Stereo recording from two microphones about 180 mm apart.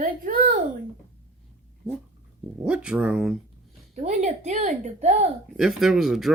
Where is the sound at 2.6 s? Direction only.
5° right (ahead or behind).